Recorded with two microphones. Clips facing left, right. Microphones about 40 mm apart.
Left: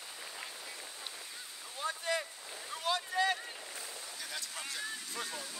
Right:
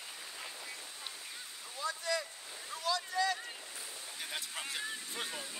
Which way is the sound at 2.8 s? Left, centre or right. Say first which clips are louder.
Left 1 dB; left.